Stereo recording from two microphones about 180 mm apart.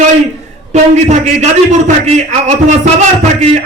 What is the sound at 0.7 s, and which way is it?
A man's voice, 40° right (ahead or behind).